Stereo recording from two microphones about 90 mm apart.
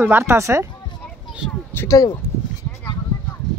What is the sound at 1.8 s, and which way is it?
Speech, 45° left (ahead or behind).